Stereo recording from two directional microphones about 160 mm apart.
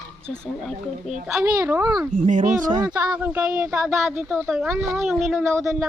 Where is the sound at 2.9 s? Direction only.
10° right (ahead or behind).